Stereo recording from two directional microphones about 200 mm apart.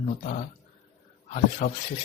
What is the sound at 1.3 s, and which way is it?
Speech, 40° left (ahead or behind).